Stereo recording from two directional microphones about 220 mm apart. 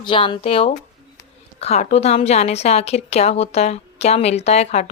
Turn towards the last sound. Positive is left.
turn(degrees=30)  # may be behind; listen again after turning